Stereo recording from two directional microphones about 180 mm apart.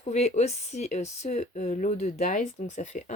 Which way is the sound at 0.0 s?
40° left (ahead or behind).